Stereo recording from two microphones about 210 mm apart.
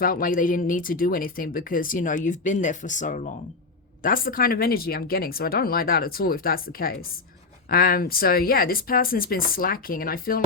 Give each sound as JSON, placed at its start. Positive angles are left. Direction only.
{"t": 0.0, "sound": "speech", "side_deg": 40}